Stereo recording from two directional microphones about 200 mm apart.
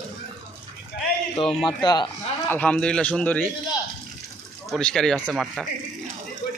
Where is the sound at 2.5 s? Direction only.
5° left (ahead or behind).